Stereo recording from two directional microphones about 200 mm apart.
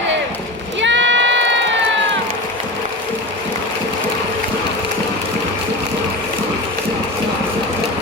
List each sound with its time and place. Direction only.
0.8 s crowd: 65° right (ahead or behind)